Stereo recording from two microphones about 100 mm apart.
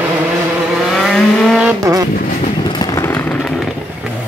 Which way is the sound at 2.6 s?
45° left (ahead or behind).